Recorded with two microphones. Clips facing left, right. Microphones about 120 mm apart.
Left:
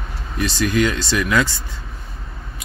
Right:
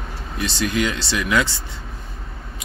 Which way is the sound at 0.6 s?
20° right (ahead or behind).